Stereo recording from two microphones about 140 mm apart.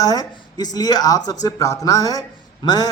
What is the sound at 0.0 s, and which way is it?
A man's voice, 25° left (ahead or behind).